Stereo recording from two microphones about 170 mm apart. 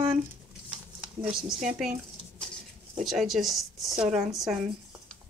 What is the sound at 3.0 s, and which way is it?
A woman's voice, centre (ahead or behind).